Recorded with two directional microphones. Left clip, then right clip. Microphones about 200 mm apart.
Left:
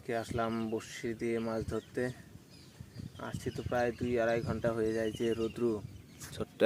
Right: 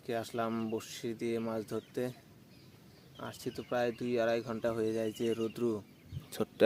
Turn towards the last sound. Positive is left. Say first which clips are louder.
# right 4 dB
turn(degrees=-35)  # may be behind; listen again after turning